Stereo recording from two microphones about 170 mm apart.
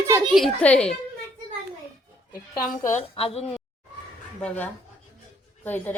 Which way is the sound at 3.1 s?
35° left (ahead or behind).